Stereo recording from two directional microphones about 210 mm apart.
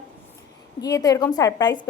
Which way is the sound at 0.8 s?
15° left (ahead or behind).